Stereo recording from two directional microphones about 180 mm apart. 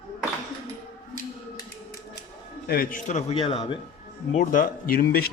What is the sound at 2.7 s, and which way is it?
A man's voice, 50° left (ahead or behind).